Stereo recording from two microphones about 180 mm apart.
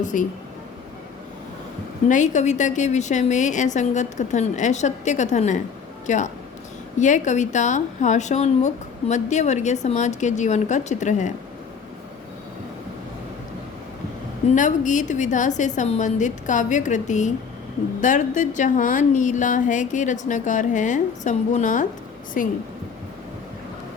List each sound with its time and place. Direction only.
0.0 s speech: 45° left (ahead or behind)
2.0 s speech: 45° left (ahead or behind)
14.5 s speech: 45° left (ahead or behind)